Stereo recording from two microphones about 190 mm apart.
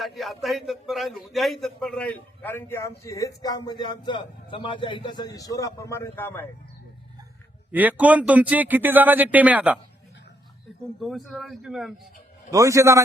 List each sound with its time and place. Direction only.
0.0 s a man's voice: centre (ahead or behind)
7.7 s speech: 10° right (ahead or behind)
11.0 s a man's voice: centre (ahead or behind)
12.5 s speech: 15° right (ahead or behind)